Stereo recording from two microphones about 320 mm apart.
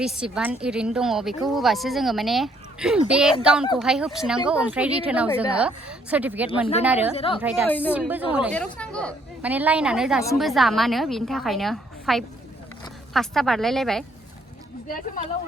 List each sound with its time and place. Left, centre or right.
0.0 s a woman's voice: centre
7.2 s a woman's voice: centre
7.4 s a woman's voice: centre